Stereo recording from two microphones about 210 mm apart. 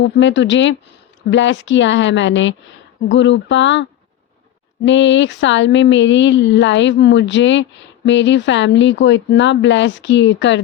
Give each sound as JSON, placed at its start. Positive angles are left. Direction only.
{"t": 0.0, "sound": "speech", "side_deg": 60}
{"t": 4.9, "sound": "speech", "side_deg": 60}